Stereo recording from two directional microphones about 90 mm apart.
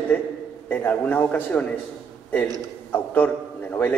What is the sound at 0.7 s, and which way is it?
A man's voice, 20° left (ahead or behind).